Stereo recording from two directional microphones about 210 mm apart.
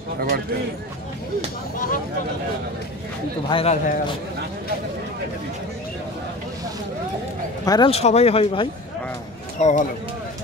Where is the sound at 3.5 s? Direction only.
30° left (ahead or behind).